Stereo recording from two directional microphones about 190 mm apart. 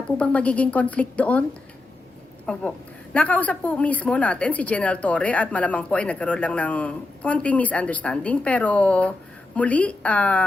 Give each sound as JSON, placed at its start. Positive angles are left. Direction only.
{"t": 0.2, "sound": "a woman's voice", "side_deg": 5}
{"t": 2.5, "sound": "a woman's voice", "side_deg": 5}